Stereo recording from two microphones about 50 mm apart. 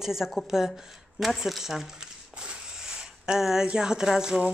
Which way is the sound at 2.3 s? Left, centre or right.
Centre.